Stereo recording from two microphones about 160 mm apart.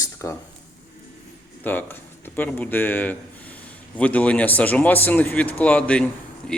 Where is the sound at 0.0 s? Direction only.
20° left (ahead or behind).